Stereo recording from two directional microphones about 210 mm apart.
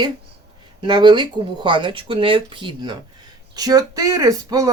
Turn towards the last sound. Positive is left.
turn(degrees=-15)  # may be behind; listen again after turning